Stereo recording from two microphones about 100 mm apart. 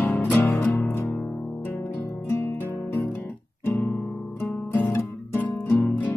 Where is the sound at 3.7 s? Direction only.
25° left (ahead or behind).